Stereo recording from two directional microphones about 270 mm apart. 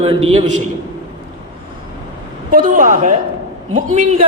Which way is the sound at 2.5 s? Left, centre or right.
Right.